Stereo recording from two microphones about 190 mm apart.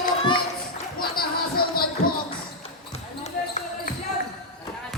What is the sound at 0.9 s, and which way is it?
Music, 50° left (ahead or behind).